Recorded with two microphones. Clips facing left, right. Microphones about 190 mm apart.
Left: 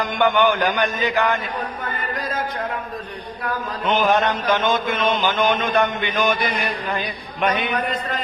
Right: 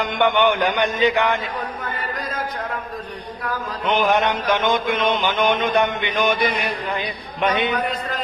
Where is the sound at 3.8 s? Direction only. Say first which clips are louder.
Even; 15° right (ahead or behind).